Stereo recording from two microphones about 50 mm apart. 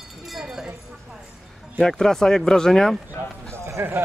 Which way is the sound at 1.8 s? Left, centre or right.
Centre.